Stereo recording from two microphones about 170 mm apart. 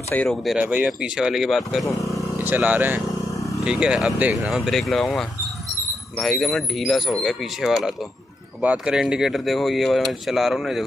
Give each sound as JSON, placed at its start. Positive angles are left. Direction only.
{"t": 0.1, "sound": "speech", "side_deg": 5}